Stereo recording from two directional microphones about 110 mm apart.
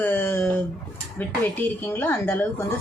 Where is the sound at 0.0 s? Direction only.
20° left (ahead or behind).